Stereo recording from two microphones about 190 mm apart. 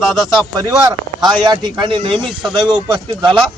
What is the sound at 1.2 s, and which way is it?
Speech, 25° right (ahead or behind).